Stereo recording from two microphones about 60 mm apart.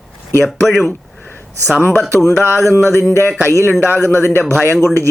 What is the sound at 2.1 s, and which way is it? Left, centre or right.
Speech, left.